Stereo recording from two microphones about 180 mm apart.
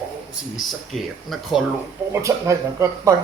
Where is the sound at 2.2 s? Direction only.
15° right (ahead or behind).